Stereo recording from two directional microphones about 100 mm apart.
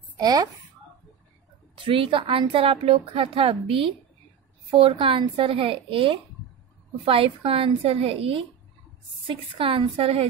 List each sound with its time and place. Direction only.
0.2 s speech: 40° right (ahead or behind)
1.9 s a woman's voice: 65° right (ahead or behind)
9.3 s a woman's voice: 60° right (ahead or behind); by 10.2 s 75° right (ahead or behind)